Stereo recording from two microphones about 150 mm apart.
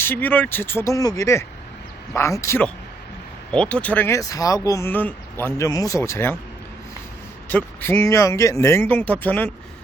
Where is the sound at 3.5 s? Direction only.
5° left (ahead or behind).